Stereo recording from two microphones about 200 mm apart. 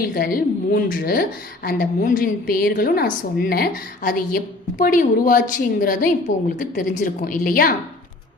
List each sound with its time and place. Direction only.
0.0 s a woman's voice: 45° left (ahead or behind)